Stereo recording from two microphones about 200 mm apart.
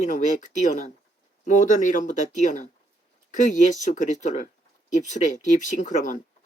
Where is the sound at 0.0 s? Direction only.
40° left (ahead or behind).